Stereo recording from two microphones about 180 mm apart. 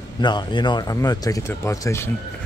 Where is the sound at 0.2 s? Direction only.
25° left (ahead or behind).